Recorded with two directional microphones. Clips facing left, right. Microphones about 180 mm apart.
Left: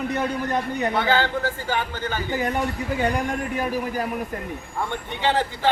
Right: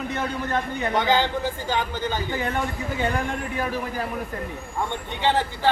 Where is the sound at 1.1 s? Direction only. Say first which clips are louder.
Even; 15° right (ahead or behind).